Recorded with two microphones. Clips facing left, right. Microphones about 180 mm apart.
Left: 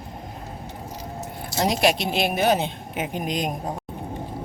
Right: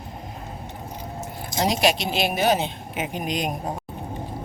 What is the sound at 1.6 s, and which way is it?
A woman's voice, 55° left (ahead or behind).